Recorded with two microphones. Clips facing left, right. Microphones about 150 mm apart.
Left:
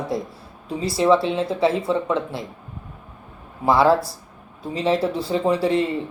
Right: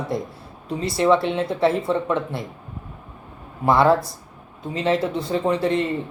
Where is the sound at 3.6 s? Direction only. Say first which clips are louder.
Even; centre (ahead or behind).